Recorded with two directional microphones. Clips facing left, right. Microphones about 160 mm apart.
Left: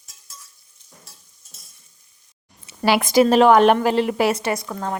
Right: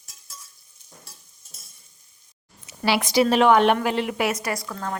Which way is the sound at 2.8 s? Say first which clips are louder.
Left 4 dB; 50° left (ahead or behind).